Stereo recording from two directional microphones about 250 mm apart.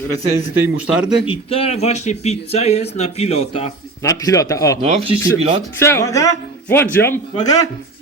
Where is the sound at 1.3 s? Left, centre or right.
Left.